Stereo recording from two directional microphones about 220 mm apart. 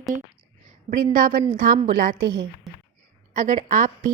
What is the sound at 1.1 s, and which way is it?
A woman's voice, 35° right (ahead or behind).